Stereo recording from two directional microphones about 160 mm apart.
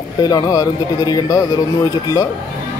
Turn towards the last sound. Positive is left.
turn(degrees=20)  # may be behind; listen again after turning